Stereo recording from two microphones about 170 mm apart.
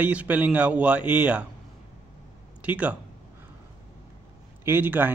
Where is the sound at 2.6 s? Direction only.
5° right (ahead or behind).